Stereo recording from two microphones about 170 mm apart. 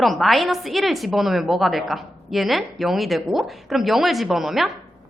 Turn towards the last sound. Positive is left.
turn(degrees=0)  # may be behind; listen again after turning